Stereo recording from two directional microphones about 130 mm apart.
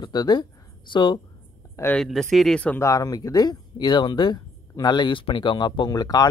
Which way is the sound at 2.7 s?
25° left (ahead or behind).